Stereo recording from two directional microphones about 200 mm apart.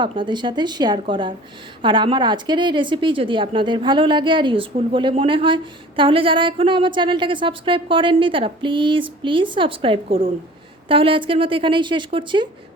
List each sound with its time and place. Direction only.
0.0 s a woman's voice: 25° right (ahead or behind)